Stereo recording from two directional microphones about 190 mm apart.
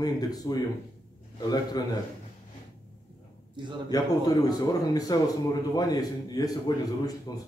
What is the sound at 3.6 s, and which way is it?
Speech, 25° right (ahead or behind).